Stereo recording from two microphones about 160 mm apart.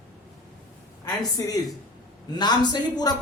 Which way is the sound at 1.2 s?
25° left (ahead or behind).